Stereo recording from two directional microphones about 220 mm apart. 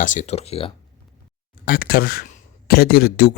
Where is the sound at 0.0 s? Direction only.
35° left (ahead or behind).